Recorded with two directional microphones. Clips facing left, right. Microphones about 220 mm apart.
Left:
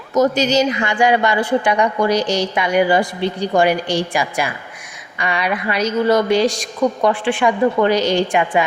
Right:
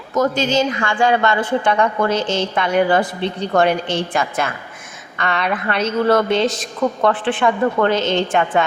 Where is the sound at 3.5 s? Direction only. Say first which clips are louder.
Even; 10° left (ahead or behind).